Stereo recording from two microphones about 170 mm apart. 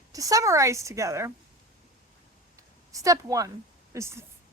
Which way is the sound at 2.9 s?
20° right (ahead or behind).